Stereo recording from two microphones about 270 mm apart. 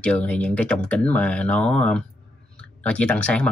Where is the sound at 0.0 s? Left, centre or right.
Centre.